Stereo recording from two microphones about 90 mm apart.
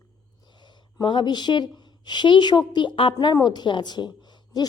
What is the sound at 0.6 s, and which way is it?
A woman's voice, 60° left (ahead or behind).